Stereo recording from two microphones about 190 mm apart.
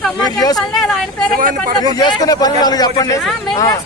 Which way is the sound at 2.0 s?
20° left (ahead or behind).